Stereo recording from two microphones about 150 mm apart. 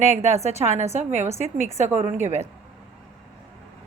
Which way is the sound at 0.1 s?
45° right (ahead or behind).